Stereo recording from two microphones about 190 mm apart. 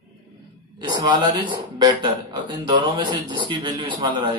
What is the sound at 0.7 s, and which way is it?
Speech, 25° right (ahead or behind).